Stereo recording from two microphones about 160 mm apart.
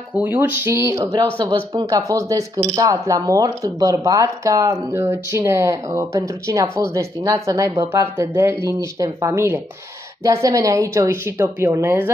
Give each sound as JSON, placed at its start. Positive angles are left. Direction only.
{"t": 0.1, "sound": "speech", "side_deg": -10}